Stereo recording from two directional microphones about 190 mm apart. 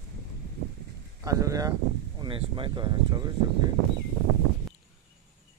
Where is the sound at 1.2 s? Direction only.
15° right (ahead or behind).